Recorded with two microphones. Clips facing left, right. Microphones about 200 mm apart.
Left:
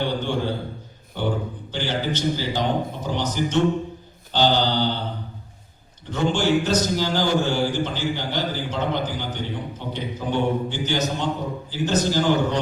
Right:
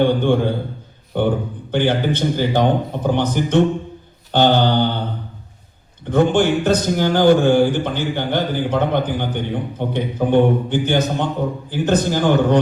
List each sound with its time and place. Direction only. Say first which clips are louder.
0.0 s a man's voice: right 8 dB; 55° right (ahead or behind)
6.1 s a man's voice: right 6 dB; 55° right (ahead or behind)